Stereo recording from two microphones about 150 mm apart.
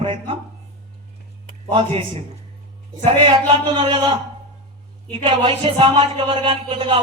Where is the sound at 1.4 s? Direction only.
40° right (ahead or behind).